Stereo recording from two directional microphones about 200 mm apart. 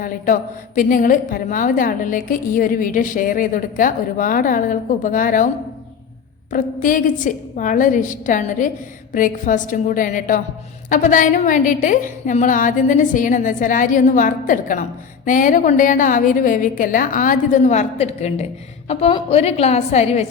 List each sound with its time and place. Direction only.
0.0 s a woman's voice: 40° left (ahead or behind)
6.5 s a woman's voice: 40° left (ahead or behind)